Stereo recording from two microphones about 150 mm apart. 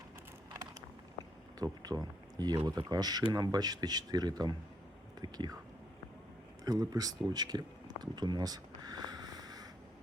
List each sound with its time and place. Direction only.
1.5 s speech: 25° right (ahead or behind)
6.7 s speech: 25° right (ahead or behind)
7.3 s a sound: 30° right (ahead or behind)